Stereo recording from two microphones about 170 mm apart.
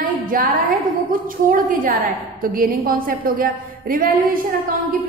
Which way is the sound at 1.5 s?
55° right (ahead or behind).